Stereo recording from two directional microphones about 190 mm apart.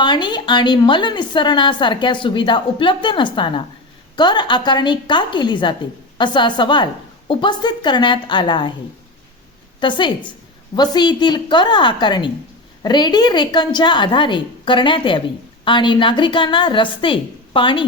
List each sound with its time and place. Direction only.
0.0 s a woman's voice: 25° left (ahead or behind)
9.8 s a woman's voice: 25° left (ahead or behind)